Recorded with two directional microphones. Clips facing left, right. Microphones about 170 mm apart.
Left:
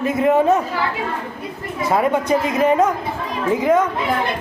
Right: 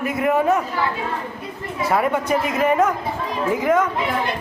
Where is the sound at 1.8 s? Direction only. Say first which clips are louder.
Left 2 dB; 20° left (ahead or behind).